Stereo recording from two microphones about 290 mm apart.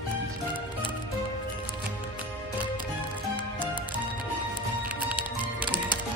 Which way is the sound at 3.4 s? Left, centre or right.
Centre.